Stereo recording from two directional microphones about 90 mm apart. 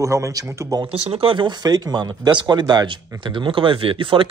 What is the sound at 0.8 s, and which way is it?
Speech, 85° right.